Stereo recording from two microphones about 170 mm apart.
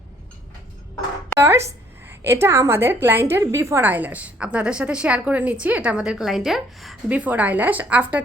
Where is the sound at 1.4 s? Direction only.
15° right (ahead or behind).